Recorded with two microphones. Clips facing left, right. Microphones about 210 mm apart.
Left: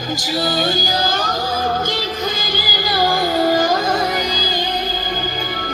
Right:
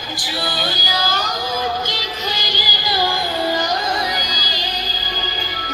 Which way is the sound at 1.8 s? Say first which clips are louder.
Left 4 dB; 50° left (ahead or behind).